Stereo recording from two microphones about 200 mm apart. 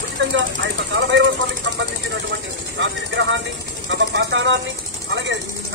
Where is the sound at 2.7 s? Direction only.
65° right (ahead or behind).